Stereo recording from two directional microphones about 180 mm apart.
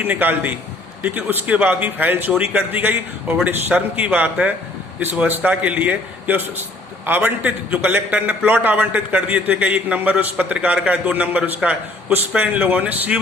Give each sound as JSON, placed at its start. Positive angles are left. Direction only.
{"t": 0.0, "sound": "a man's voice", "side_deg": -10}